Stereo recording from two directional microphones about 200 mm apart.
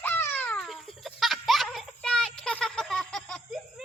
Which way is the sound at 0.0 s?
10° left (ahead or behind).